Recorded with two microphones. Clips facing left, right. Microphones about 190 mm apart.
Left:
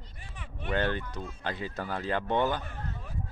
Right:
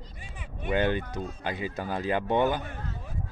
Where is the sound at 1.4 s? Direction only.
10° right (ahead or behind).